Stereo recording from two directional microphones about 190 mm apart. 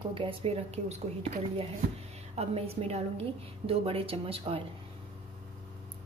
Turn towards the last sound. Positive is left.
turn(degrees=-30)  # may be behind; listen again after turning